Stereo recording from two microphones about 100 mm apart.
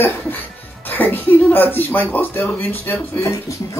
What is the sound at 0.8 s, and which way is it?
Speech, 20° left (ahead or behind).